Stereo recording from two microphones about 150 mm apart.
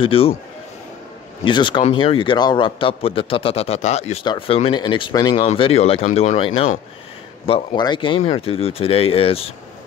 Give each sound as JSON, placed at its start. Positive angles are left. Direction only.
{"t": 0.0, "sound": "a man's voice", "side_deg": 40}
{"t": 1.4, "sound": "a man's voice", "side_deg": 35}
{"t": 4.2, "sound": "a man's voice", "side_deg": 35}